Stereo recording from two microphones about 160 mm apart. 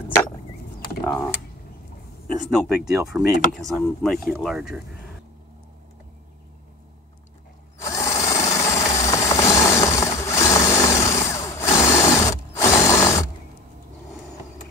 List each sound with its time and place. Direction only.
1.0 s mechanisms: 10° left (ahead or behind)
2.3 s speech: 5° right (ahead or behind)
7.8 s tools: 20° left (ahead or behind)